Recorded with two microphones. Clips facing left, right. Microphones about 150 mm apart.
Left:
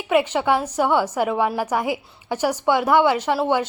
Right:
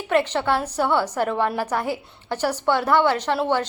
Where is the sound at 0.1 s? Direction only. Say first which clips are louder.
Left 2 dB; 10° left (ahead or behind).